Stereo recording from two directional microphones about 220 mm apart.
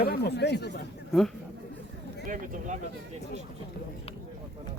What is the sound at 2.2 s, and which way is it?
Speech, 35° right (ahead or behind).